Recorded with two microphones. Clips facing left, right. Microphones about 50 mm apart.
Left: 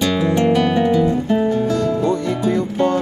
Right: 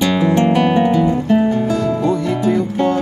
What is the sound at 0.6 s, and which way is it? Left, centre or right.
Guitar, right.